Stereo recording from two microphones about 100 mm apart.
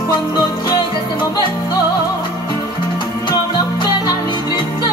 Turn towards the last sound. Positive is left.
turn(degrees=45)  # may be behind; listen again after turning